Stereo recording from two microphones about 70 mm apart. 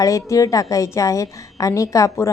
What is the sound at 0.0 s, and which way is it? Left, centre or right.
A woman's voice, left.